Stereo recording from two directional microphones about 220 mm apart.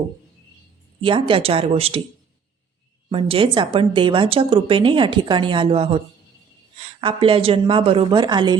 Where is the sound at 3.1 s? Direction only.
25° right (ahead or behind).